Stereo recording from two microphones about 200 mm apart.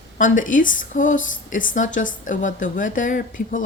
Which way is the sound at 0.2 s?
40° left (ahead or behind).